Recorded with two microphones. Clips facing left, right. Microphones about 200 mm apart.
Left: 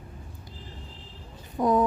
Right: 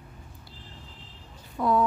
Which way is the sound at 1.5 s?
20° left (ahead or behind).